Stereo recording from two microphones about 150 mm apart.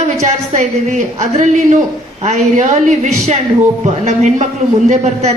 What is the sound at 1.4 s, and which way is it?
A woman's voice, 55° right (ahead or behind).